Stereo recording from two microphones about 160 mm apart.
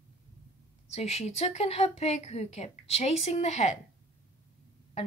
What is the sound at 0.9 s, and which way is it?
A woman's voice, 40° left (ahead or behind).